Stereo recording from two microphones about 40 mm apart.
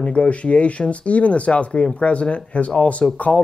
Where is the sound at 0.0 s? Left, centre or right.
Left.